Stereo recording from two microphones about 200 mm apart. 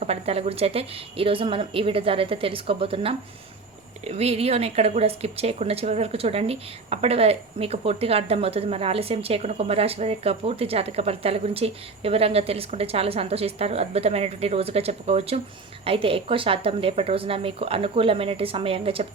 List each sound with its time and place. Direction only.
0.0 s speech: 30° right (ahead or behind)